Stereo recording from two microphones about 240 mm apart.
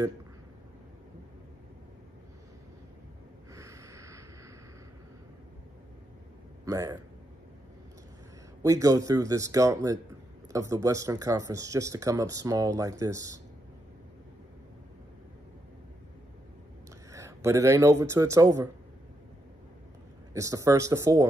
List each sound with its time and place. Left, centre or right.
3.5 s a sound: centre
6.6 s a man's voice: centre
8.6 s speech: centre
17.1 s speech: centre
20.3 s speech: centre